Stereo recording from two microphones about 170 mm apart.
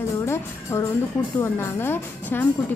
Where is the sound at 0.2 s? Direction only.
15° left (ahead or behind).